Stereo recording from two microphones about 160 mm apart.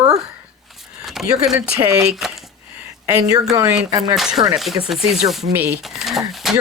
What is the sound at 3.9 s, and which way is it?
Speech, 25° right (ahead or behind).